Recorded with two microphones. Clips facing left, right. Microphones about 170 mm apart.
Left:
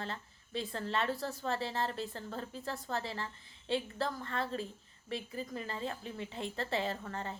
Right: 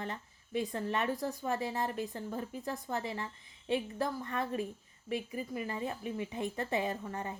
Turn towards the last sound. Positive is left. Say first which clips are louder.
# right 1 dB
turn(degrees=-15)  # may be behind; listen again after turning